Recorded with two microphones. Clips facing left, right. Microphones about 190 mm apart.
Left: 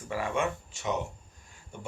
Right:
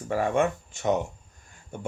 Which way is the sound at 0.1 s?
45° right (ahead or behind).